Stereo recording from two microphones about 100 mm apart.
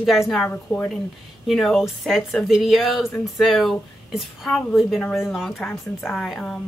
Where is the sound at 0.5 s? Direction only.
15° left (ahead or behind).